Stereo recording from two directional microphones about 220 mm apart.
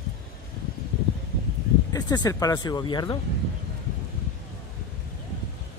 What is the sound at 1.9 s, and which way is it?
Speech, 15° left (ahead or behind).